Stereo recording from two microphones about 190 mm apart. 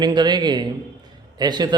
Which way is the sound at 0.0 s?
20° right (ahead or behind).